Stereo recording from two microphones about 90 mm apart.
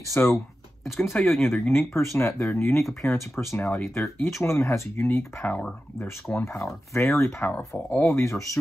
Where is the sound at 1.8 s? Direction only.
25° left (ahead or behind).